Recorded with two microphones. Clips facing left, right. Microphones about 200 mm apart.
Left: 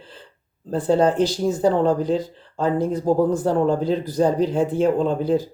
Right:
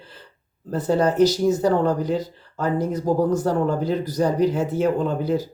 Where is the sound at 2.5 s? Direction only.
30° left (ahead or behind).